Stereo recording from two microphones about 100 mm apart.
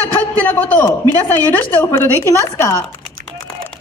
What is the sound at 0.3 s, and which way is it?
A man's voice, 20° left (ahead or behind).